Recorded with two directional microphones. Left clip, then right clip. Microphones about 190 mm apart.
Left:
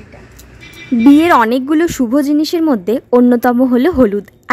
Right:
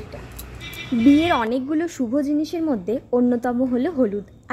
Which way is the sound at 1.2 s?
35° left (ahead or behind).